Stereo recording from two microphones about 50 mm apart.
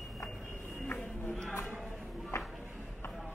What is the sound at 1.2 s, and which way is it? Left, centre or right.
Music, centre.